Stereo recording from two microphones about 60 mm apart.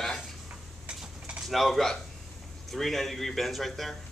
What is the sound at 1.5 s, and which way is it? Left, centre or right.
A man's voice, centre.